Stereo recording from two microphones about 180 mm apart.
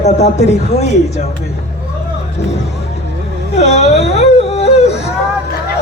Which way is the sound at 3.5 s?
35° left (ahead or behind).